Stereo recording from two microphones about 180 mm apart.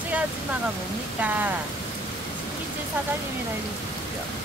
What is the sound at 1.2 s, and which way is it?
Speech, 10° right (ahead or behind).